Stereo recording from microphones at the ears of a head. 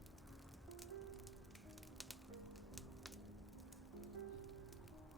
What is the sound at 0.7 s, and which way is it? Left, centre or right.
Music, right.